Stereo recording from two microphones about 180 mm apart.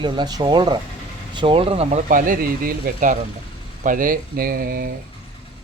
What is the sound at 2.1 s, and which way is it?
Speech, 50° right (ahead or behind).